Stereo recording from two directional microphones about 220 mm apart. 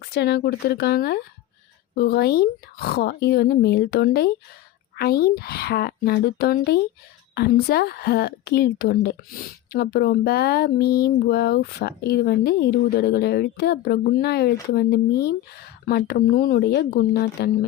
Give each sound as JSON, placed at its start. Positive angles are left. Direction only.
{"t": 0.0, "sound": "speech", "side_deg": 50}